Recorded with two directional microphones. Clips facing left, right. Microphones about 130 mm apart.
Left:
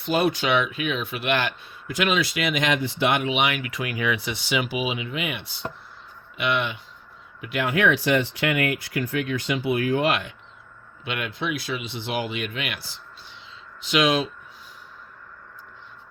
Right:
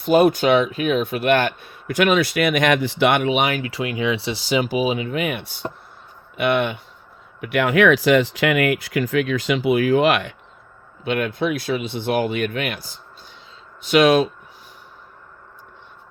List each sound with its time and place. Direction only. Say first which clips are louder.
0.0 s speech: right 7 dB; 45° right (ahead or behind)
3.6 s speech: right 5 dB; 30° right (ahead or behind); by 6.7 s 50° right (ahead or behind)
7.4 s speech: right 6 dB; 65° right (ahead or behind); by 10.3 s 80° right
11.0 s speech: right 8 dB; 45° right (ahead or behind)